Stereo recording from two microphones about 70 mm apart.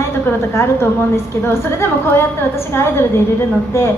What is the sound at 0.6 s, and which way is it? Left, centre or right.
A woman's voice, left.